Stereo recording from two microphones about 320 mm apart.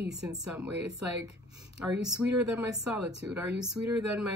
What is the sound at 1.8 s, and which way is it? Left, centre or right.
Speech, centre.